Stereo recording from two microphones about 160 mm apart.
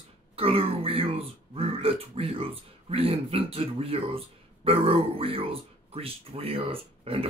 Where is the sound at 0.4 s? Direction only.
35° right (ahead or behind).